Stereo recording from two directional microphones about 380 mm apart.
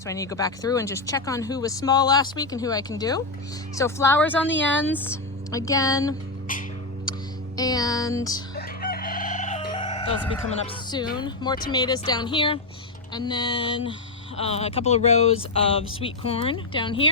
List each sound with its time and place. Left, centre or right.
0.0 s speech: centre
6.5 s a sound: left
7.5 s speech: centre
8.5 s chicken: left
11.2 s speech: centre